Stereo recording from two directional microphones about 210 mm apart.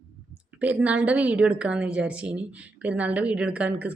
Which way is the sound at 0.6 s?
5° right (ahead or behind).